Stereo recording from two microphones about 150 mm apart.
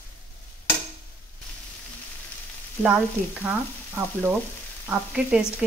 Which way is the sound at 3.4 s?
10° right (ahead or behind).